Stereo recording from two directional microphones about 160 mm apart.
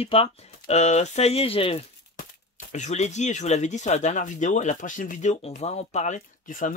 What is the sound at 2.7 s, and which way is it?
Speech, 45° left (ahead or behind).